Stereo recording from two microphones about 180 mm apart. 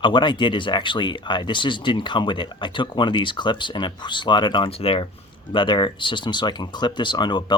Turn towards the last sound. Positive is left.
turn(degrees=25)  # may be behind; listen again after turning